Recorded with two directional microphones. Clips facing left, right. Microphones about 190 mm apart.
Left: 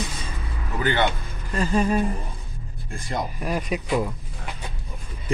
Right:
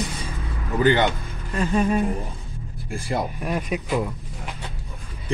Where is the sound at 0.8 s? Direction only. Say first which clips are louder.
Right 4 dB; 15° right (ahead or behind).